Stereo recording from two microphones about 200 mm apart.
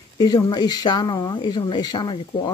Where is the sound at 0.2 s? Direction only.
20° left (ahead or behind).